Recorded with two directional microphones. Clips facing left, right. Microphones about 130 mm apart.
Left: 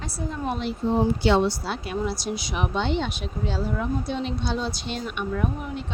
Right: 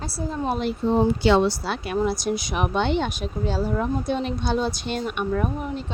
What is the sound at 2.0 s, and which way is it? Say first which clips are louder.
Speech: right 4 dB; 50° right (ahead or behind).